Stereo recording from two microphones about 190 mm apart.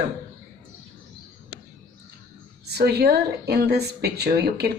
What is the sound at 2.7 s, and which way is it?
Speech, 60° right (ahead or behind).